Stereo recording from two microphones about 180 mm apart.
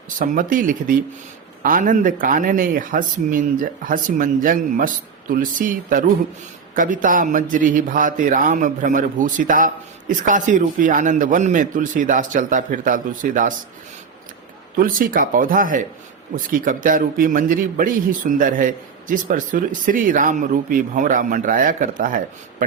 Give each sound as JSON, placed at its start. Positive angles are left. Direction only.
{"t": 0.2, "sound": "a man's voice", "side_deg": -50}
{"t": 14.8, "sound": "a man's voice", "side_deg": -50}